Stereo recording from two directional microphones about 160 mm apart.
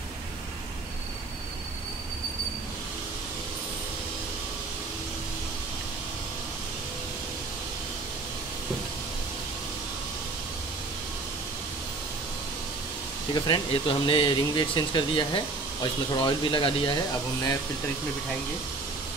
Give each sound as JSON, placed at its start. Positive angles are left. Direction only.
{"t": 13.3, "sound": "speech", "side_deg": 30}